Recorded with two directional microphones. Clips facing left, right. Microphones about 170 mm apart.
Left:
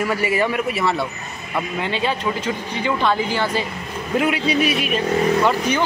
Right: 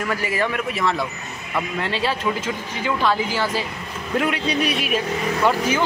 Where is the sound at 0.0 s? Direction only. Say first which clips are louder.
Left 3 dB; 10° left (ahead or behind).